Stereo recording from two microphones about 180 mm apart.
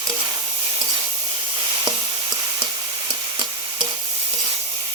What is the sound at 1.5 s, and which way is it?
Sizzle, 25° right (ahead or behind).